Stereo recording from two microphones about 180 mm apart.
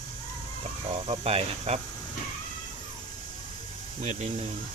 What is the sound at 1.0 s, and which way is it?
Speech, 35° right (ahead or behind).